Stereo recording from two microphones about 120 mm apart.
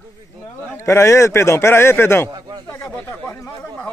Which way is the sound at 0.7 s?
25° left (ahead or behind).